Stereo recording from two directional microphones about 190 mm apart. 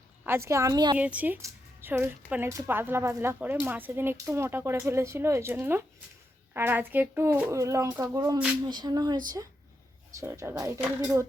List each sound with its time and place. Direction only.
0.3 s speech: 15° right (ahead or behind)
0.9 s speech: 10° right (ahead or behind)
8.6 s a sound: 20° right (ahead or behind)
10.2 s speech: 15° right (ahead or behind)